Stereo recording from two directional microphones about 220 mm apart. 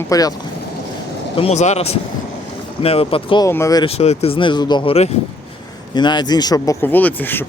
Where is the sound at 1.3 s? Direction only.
30° left (ahead or behind); by 7.5 s 10° left (ahead or behind).